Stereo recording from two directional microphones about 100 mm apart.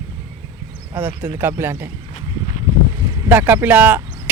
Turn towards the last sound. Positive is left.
turn(degrees=-15)  # may be behind; listen again after turning